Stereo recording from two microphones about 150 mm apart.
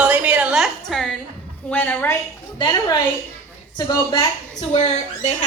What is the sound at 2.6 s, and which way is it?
Speech, 25° left (ahead or behind).